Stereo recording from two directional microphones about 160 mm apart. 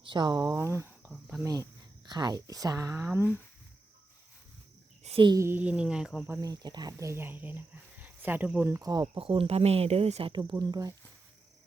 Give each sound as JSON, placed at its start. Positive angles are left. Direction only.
{"t": 0.0, "sound": "speech", "side_deg": -30}
{"t": 2.0, "sound": "speech", "side_deg": -25}
{"t": 5.0, "sound": "speech", "side_deg": -35}
{"t": 5.4, "sound": "speech", "side_deg": -15}
{"t": 6.4, "sound": "speech", "side_deg": -25}
{"t": 8.7, "sound": "speech", "side_deg": -25}
{"t": 9.2, "sound": "speech", "side_deg": -35}